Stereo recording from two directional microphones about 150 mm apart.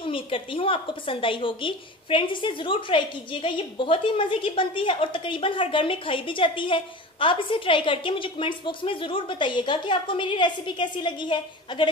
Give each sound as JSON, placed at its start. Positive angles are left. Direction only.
{"t": 0.0, "sound": "a woman's voice", "side_deg": 35}